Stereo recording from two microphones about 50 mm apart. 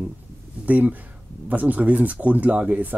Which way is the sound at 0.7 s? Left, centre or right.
Right.